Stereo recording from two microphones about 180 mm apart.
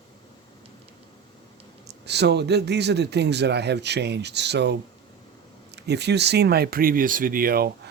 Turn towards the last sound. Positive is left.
turn(degrees=-60)  # may be behind; listen again after turning